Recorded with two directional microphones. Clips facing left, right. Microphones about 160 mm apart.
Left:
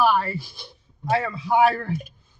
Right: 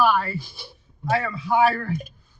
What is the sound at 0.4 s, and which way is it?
Speech, centre (ahead or behind).